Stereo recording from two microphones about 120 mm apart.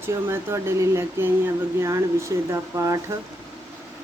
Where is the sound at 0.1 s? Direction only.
25° right (ahead or behind).